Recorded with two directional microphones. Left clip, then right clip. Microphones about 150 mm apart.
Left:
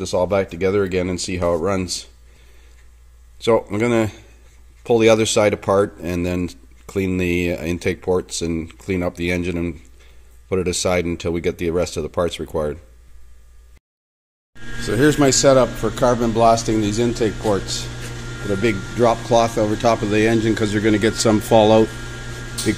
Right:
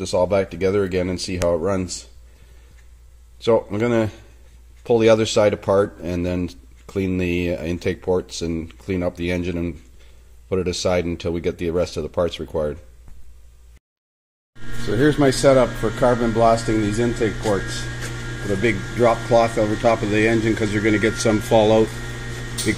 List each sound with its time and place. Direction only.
0.0 s speech: 15° left (ahead or behind)
3.4 s speech: 10° left (ahead or behind)
14.9 s speech: 15° left (ahead or behind); by 21.8 s 35° left (ahead or behind)